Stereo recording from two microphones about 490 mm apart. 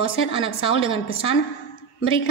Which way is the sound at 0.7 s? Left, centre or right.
Centre.